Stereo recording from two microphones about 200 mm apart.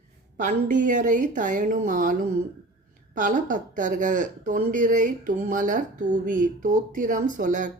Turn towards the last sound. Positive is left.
turn(degrees=-40)  # may be behind; listen again after turning